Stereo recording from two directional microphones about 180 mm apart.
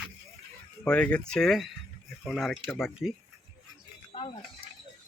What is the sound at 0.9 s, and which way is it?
Speech, 5° left (ahead or behind).